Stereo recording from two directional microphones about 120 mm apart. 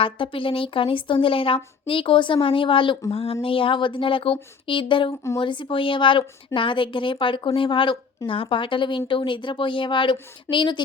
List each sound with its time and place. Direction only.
0.0 s a woman's voice: 45° left (ahead or behind)